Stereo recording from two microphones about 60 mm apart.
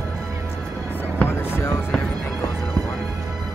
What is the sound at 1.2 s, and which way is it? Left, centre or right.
Music, left.